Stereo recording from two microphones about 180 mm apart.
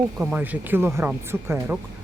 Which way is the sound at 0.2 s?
5° right (ahead or behind).